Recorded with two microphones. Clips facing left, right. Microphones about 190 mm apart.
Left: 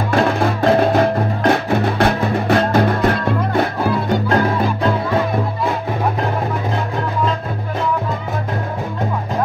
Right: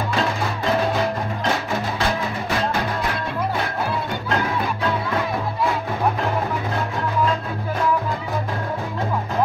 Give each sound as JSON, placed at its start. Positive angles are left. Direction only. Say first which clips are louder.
{"t": 0.1, "sound": "music", "louder": "left 11 dB", "side_deg": 55}